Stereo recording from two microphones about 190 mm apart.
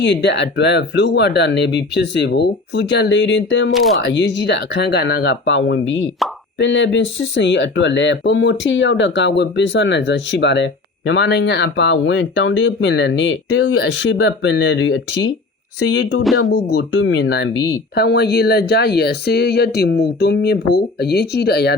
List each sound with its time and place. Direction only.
0.0 s speech: 65° left (ahead or behind)
3.7 s speech: centre (ahead or behind)
4.0 s speech: 70° left (ahead or behind)
16.4 s speech: 80° left
17.9 s speech: 60° left (ahead or behind)